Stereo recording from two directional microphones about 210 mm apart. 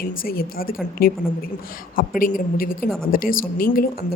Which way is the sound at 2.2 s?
40° left (ahead or behind).